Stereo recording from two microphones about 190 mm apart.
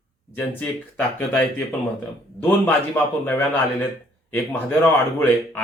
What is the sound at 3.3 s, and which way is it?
Speech, 10° left (ahead or behind).